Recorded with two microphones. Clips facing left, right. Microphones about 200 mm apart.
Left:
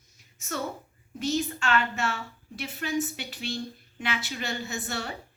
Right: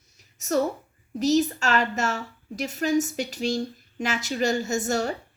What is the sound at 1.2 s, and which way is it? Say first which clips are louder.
A woman's voice: right 7 dB; 40° right (ahead or behind).